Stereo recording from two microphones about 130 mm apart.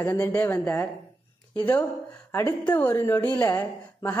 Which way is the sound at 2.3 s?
20° left (ahead or behind).